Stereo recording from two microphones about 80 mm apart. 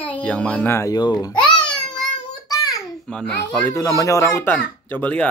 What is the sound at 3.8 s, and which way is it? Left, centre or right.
Speech, left.